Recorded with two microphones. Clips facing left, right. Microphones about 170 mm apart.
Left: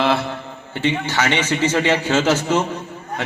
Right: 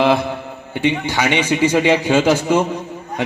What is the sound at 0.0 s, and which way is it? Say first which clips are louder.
A man's voice: right 4 dB; 15° right (ahead or behind).